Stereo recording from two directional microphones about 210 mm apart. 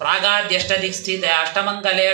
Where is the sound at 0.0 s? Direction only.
50° right (ahead or behind).